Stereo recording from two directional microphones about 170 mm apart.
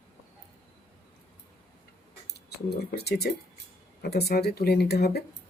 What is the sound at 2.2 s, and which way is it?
Speech, 75° left (ahead or behind).